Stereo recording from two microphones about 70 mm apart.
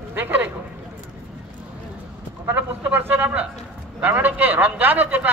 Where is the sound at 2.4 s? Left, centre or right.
Right.